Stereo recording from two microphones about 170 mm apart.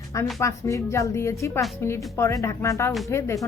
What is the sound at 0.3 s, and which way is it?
A woman's voice, 20° left (ahead or behind).